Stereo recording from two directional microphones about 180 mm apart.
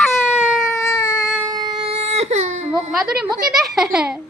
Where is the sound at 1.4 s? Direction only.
20° right (ahead or behind); by 2.9 s 40° right (ahead or behind).